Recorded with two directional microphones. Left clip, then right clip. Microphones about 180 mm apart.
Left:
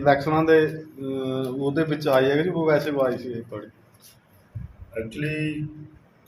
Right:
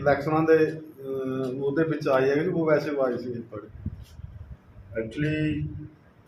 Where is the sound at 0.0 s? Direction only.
50° left (ahead or behind).